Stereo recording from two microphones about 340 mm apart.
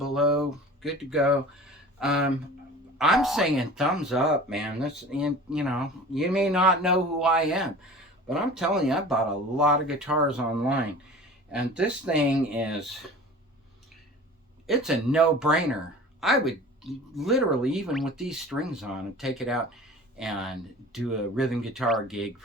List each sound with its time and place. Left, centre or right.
0.0 s a sound: centre
2.0 s speech: centre
14.7 s speech: centre